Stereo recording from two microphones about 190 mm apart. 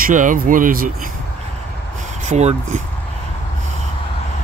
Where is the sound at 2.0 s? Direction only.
40° right (ahead or behind).